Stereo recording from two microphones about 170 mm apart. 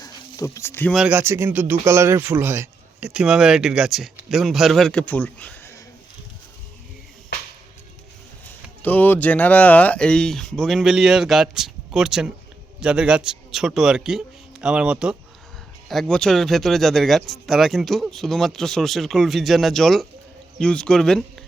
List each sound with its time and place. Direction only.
0.0 s a sound: 20° left (ahead or behind)
0.9 s speech: 10° right (ahead or behind); by 5.8 s 10° left (ahead or behind)
8.8 s speech: 10° left (ahead or behind)